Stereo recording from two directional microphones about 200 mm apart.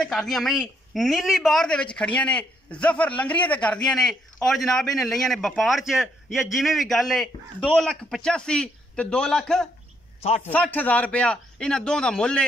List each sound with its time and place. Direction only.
0.0 s a man's voice: centre (ahead or behind)
10.2 s a man's voice: 30° left (ahead or behind)
10.5 s a man's voice: 10° left (ahead or behind)